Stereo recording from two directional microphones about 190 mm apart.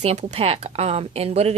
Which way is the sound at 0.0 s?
35° right (ahead or behind).